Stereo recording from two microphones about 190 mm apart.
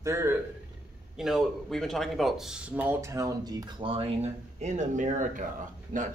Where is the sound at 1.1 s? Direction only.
Centre (ahead or behind).